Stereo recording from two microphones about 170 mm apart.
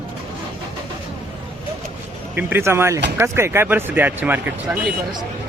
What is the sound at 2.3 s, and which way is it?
Speech, 15° right (ahead or behind).